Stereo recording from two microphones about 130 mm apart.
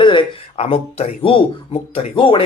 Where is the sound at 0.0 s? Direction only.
40° left (ahead or behind).